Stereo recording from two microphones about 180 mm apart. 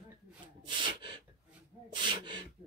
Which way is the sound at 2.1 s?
25° right (ahead or behind).